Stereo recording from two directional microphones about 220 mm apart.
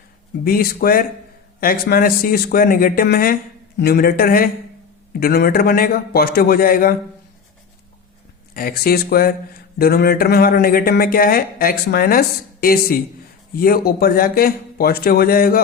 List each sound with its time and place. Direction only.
0.4 s speech: 40° left (ahead or behind)
8.5 s speech: 45° left (ahead or behind)